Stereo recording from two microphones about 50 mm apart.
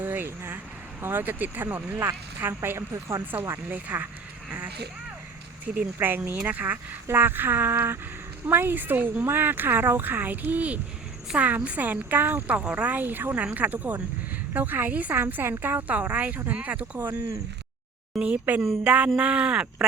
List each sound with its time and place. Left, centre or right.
0.0 s vehicle: right
1.0 s a woman's voice: right
2.7 s speech: right
3.7 s a woman's voice: right
5.7 s speech: centre
6.1 s a woman's voice: right
7.1 s a woman's voice: right
12.5 s a woman's voice: right
15.2 s speech: right
15.9 s a woman's voice: right
17.0 s speech: right
18.2 s speech: right